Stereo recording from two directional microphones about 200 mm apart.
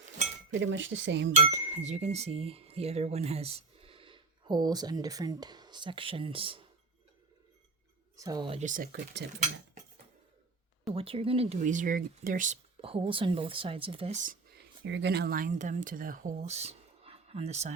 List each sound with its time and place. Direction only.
0.6 s speech: 65° right (ahead or behind)
1.5 s speech: 40° right (ahead or behind)
8.1 s speech: 20° right (ahead or behind); by 9.5 s 50° right (ahead or behind)
10.9 s speech: 30° right (ahead or behind)
12.8 s speech: 25° right (ahead or behind)
14.5 s speech: 60° right (ahead or behind); by 17.7 s 35° right (ahead or behind)